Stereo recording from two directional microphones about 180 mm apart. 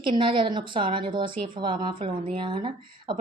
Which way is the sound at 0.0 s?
30° right (ahead or behind).